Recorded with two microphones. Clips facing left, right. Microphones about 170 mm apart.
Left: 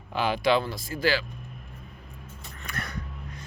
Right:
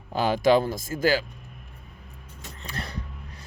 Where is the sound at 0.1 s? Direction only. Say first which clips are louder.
Right 4 dB; 40° right (ahead or behind).